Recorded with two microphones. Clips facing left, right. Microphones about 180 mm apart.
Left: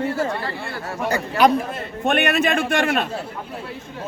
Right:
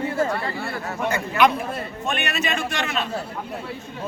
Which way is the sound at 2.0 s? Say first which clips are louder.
Left 8 dB; 55° left (ahead or behind).